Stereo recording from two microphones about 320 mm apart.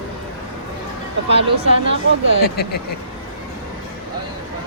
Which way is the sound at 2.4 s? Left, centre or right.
Left.